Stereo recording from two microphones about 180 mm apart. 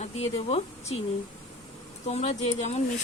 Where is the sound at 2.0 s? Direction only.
35° left (ahead or behind).